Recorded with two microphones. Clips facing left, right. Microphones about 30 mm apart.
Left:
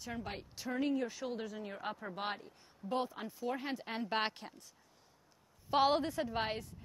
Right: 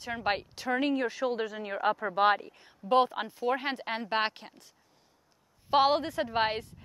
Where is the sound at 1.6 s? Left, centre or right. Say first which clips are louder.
Right 12 dB; right.